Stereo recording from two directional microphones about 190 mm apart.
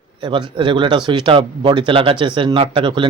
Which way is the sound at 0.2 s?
25° right (ahead or behind).